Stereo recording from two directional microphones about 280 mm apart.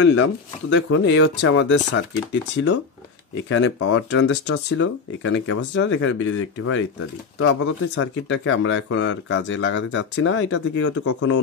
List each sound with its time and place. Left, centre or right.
0.0 s speech: left